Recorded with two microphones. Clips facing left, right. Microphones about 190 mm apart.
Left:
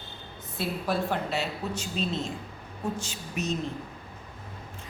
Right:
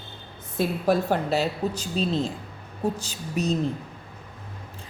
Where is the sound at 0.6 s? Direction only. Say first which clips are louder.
Right 6 dB; 40° right (ahead or behind).